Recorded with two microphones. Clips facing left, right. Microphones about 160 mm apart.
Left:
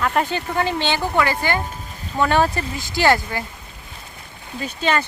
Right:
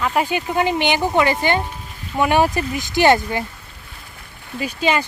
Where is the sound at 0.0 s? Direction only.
10° right (ahead or behind).